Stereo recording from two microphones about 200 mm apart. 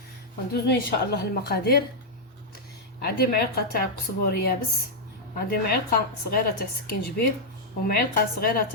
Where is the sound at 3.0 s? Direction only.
50° left (ahead or behind).